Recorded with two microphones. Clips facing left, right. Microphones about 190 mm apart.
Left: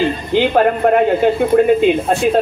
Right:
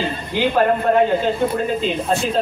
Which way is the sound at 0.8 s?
60° left (ahead or behind).